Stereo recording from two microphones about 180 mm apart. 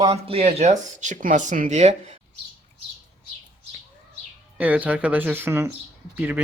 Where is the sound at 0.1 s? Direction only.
30° right (ahead or behind).